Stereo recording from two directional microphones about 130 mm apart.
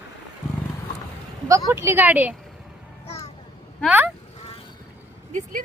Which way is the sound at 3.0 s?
50° left (ahead or behind).